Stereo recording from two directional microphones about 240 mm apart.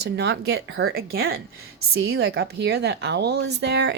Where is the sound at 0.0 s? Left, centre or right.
Right.